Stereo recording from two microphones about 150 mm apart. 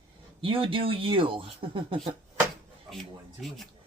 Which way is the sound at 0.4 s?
35° right (ahead or behind).